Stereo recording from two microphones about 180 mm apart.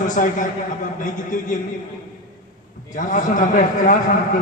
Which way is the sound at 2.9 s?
45° left (ahead or behind).